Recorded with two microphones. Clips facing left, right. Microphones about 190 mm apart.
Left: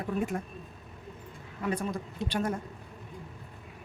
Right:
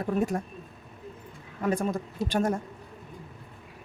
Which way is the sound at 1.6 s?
45° right (ahead or behind).